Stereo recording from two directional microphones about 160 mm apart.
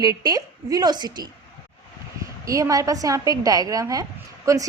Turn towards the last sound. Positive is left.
turn(degrees=-20)  # may be behind; listen again after turning